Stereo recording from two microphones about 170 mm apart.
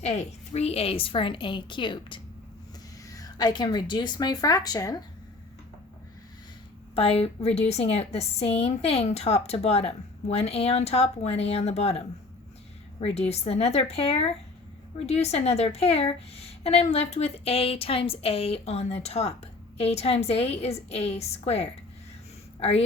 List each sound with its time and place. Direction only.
0.0 s a woman's voice: 40° left (ahead or behind); by 4.9 s 20° left (ahead or behind)
6.9 s a woman's voice: 35° left (ahead or behind)